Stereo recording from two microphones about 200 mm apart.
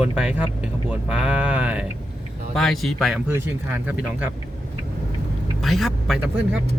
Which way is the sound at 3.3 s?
10° right (ahead or behind).